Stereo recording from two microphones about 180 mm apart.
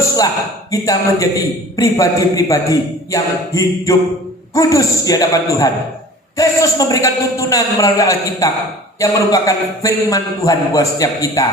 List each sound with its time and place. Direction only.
0.7 s a man's voice: 20° left (ahead or behind)